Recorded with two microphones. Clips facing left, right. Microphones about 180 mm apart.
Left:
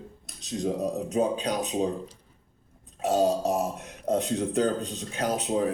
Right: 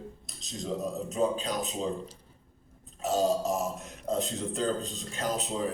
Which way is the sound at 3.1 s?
65° left (ahead or behind).